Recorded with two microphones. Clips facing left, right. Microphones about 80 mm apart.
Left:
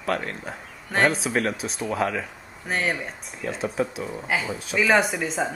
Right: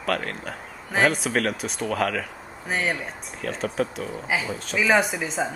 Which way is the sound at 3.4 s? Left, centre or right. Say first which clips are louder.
Even; centre.